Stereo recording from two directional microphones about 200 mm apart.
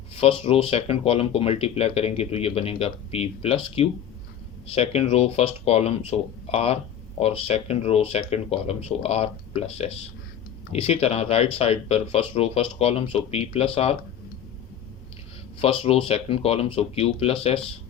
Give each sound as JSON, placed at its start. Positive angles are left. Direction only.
{"t": 0.2, "sound": "speech", "side_deg": 30}
{"t": 15.6, "sound": "speech", "side_deg": 30}